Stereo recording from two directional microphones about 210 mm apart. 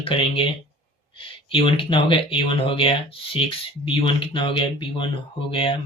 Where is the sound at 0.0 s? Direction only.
25° left (ahead or behind).